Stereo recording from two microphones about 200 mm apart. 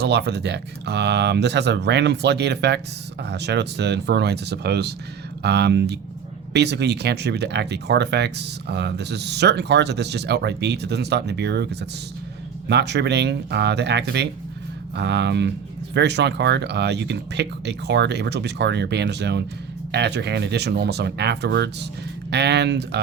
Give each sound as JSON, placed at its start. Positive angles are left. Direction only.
{"t": 0.0, "sound": "speech", "side_deg": -55}